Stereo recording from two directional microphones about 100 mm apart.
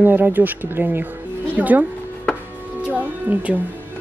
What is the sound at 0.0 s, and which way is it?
Speech, 20° right (ahead or behind).